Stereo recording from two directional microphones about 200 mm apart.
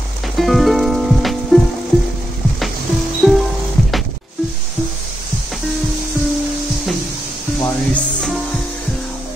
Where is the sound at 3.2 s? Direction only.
Centre (ahead or behind).